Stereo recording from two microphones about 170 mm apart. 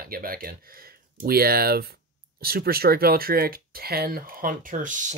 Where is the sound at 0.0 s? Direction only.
60° right (ahead or behind).